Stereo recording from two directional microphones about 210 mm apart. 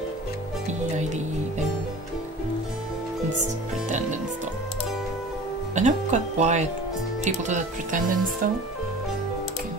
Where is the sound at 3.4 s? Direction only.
35° right (ahead or behind).